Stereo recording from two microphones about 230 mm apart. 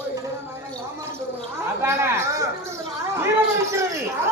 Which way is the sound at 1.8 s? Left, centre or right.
Centre.